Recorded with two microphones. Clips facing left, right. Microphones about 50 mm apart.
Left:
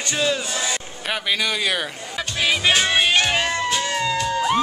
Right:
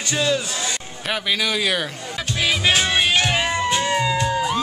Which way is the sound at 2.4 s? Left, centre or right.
Centre.